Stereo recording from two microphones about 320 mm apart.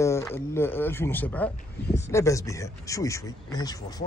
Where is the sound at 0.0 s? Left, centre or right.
Centre.